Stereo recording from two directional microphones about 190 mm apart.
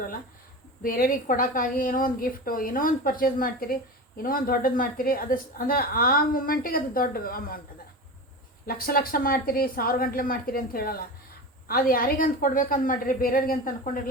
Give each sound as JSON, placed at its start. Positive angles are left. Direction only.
{"t": 0.8, "sound": "a woman's voice", "side_deg": 50}
{"t": 8.6, "sound": "a woman's voice", "side_deg": 50}